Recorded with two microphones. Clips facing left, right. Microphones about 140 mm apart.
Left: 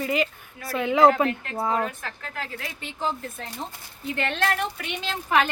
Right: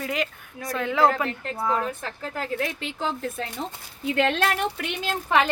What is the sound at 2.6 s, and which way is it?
Speech, 75° right (ahead or behind).